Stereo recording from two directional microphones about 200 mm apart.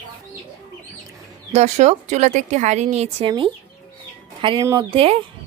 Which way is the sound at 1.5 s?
35° right (ahead or behind).